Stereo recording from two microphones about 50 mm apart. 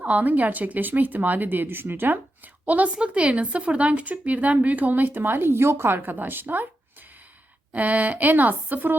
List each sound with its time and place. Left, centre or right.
0.0 s speech: right
2.6 s a woman's voice: right
6.0 s speech: right
7.7 s speech: right